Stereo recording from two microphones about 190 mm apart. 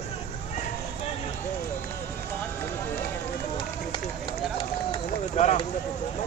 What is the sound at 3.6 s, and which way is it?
Run, 25° left (ahead or behind).